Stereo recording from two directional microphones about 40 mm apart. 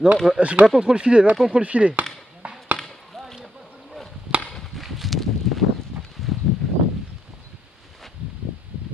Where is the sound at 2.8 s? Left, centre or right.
Centre.